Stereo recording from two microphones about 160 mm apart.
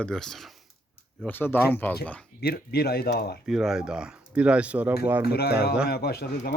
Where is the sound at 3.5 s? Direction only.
Centre (ahead or behind).